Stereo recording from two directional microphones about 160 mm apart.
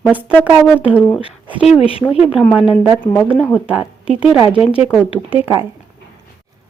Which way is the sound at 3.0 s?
10° left (ahead or behind).